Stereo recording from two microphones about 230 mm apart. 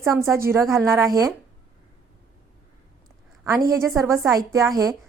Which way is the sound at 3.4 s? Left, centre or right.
Centre.